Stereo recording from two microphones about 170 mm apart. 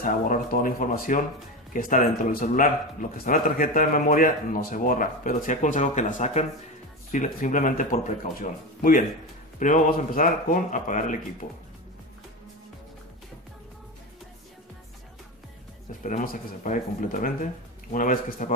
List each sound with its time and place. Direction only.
0.0 s speech: 50° left (ahead or behind)
16.0 s speech: 50° left (ahead or behind)